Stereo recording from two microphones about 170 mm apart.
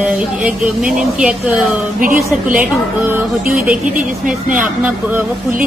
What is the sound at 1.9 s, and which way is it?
Speech, 55° right (ahead or behind).